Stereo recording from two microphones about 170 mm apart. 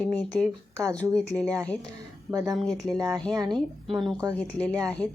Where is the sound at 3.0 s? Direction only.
20° right (ahead or behind).